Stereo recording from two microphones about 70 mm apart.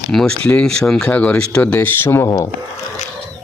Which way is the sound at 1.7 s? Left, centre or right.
Left.